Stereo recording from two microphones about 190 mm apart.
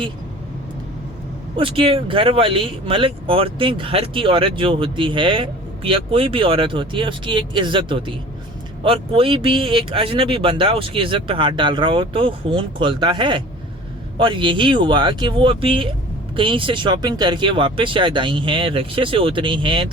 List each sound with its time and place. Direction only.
1.5 s speech: 25° right (ahead or behind)